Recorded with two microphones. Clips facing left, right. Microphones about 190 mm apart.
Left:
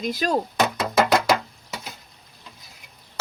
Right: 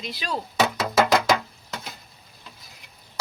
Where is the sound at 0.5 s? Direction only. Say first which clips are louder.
Right 4 dB; centre (ahead or behind).